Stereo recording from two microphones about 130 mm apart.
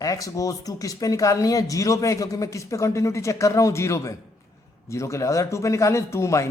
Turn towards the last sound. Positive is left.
turn(degrees=20)  # may be behind; listen again after turning